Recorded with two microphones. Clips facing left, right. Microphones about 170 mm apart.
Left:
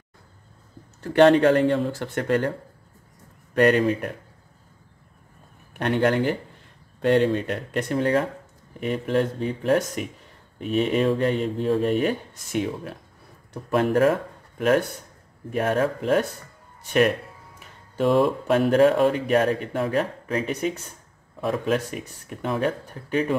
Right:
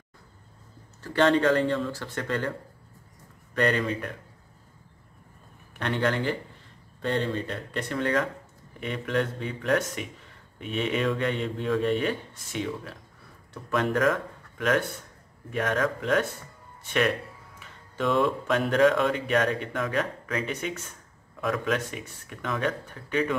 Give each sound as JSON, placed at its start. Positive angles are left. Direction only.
{"t": 1.0, "sound": "speech", "side_deg": 60}
{"t": 3.6, "sound": "speech", "side_deg": 60}
{"t": 5.8, "sound": "speech", "side_deg": 50}
{"t": 7.0, "sound": "speech", "side_deg": 65}
{"t": 8.7, "sound": "speech", "side_deg": 40}
{"t": 11.3, "sound": "a man's voice", "side_deg": 0}
{"t": 11.6, "sound": "speech", "side_deg": 35}
{"t": 13.9, "sound": "speech", "side_deg": 35}
{"t": 17.6, "sound": "a sound", "side_deg": 40}
{"t": 18.7, "sound": "speech", "side_deg": 40}